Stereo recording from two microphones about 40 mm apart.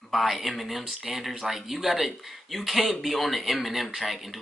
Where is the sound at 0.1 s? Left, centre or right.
Centre.